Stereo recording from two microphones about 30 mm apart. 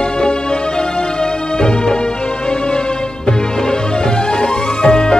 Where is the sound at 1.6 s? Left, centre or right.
Left.